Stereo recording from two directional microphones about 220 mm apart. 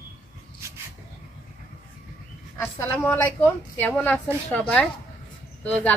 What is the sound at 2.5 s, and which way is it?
A woman's voice, 10° left (ahead or behind).